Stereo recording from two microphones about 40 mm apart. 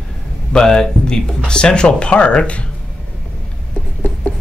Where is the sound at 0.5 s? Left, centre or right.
Centre.